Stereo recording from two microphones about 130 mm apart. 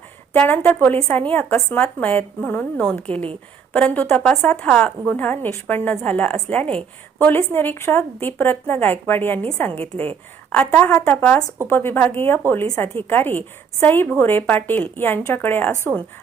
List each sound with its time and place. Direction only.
0.3 s a woman's voice: 15° left (ahead or behind)
10.5 s a woman's voice: 10° left (ahead or behind)